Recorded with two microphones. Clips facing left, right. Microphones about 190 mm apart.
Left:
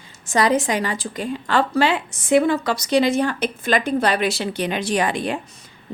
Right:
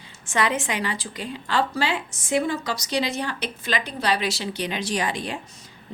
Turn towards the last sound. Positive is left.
turn(degrees=55)  # may be behind; listen again after turning